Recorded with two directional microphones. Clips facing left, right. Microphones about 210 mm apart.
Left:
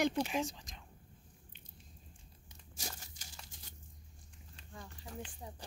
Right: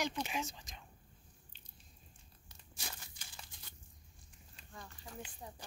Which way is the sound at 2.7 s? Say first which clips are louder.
Left 3 dB; 40° left (ahead or behind).